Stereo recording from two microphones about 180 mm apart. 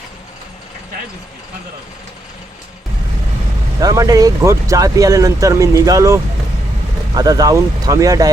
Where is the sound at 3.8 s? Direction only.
20° right (ahead or behind).